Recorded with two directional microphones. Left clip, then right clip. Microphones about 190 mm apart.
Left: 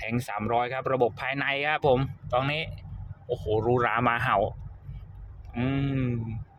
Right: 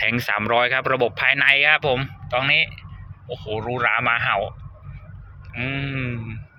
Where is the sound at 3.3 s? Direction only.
30° left (ahead or behind).